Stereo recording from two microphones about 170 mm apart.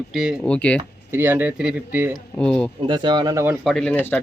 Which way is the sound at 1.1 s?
10° right (ahead or behind).